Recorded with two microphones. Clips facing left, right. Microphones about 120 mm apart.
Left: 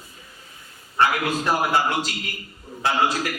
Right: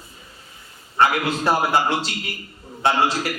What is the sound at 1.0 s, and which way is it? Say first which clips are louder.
A man's voice: right 2 dB; 30° right (ahead or behind).